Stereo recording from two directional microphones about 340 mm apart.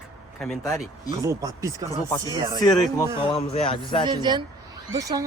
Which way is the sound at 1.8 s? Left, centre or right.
Centre.